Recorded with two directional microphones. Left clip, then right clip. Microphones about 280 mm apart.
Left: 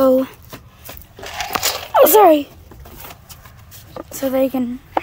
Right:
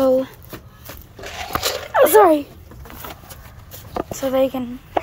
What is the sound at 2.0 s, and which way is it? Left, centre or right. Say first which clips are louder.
Speech: left 2 dB; left.